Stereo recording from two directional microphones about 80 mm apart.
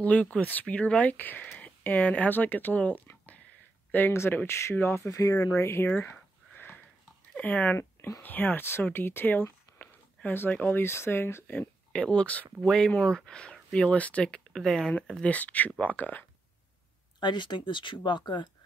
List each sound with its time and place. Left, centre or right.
0.0 s speech: centre
3.9 s speech: left
5.9 s a sound: left
7.3 s speech: centre
8.9 s a sound: left
10.5 s speech: left
11.9 s speech: centre
15.2 s speech: centre
17.2 s speech: left